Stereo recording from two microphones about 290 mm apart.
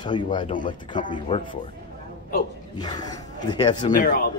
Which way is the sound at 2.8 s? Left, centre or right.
Centre.